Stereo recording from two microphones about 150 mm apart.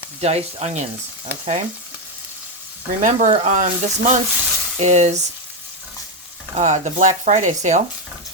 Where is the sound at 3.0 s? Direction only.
55° right (ahead or behind).